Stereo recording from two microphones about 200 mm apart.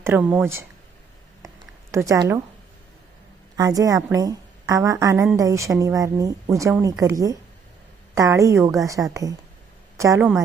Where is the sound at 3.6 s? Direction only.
15° right (ahead or behind).